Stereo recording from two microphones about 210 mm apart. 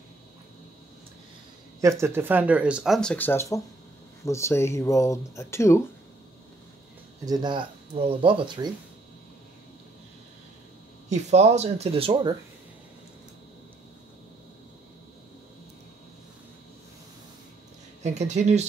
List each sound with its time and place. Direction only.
1.8 s speech: 15° right (ahead or behind); by 5.9 s 15° left (ahead or behind)
7.2 s speech: 20° right (ahead or behind)
11.1 s speech: 35° right (ahead or behind)
18.0 s speech: 35° right (ahead or behind)